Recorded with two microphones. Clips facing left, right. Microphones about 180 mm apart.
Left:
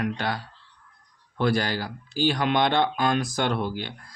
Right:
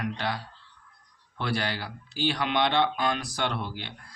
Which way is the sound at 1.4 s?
45° left (ahead or behind).